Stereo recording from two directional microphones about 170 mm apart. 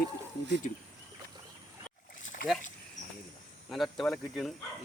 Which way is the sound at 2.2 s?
50° left (ahead or behind).